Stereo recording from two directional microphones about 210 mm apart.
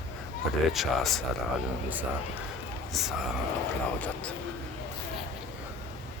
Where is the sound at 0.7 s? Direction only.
Centre (ahead or behind).